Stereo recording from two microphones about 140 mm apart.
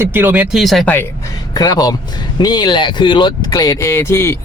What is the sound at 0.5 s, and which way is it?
Speech, centre (ahead or behind).